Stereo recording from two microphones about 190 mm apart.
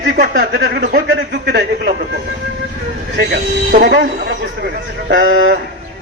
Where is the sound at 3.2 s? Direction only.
60° right (ahead or behind).